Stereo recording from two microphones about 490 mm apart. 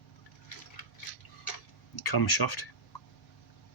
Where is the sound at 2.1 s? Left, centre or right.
Left.